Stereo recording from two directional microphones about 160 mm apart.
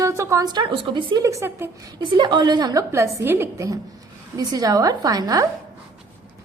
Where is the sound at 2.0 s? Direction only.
30° right (ahead or behind).